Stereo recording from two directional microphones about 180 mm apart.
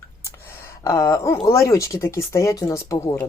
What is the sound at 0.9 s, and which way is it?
Speech, 15° left (ahead or behind).